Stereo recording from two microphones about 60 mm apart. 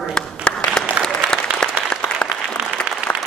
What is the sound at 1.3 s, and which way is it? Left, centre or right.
Applause, centre.